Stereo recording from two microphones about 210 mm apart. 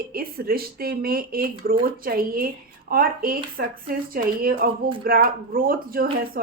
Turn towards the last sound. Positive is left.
turn(degrees=-45)  # may be behind; listen again after turning